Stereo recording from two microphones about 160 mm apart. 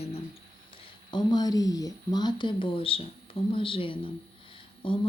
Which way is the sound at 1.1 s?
25° left (ahead or behind).